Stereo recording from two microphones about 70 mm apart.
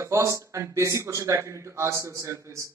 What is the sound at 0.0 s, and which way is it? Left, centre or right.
A woman's voice, right.